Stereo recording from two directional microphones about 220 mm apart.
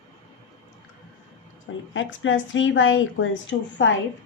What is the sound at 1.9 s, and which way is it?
A woman's voice, 60° left (ahead or behind).